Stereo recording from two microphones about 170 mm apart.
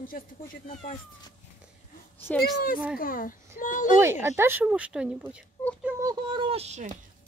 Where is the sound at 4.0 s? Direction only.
15° right (ahead or behind).